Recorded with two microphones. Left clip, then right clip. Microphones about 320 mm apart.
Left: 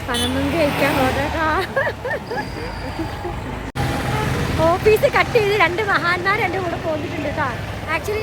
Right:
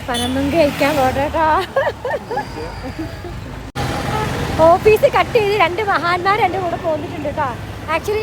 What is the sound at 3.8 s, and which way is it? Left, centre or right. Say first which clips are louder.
Vehicle: right 2 dB; right.